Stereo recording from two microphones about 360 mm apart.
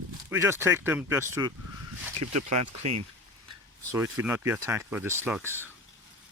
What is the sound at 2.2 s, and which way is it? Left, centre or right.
Speech, right.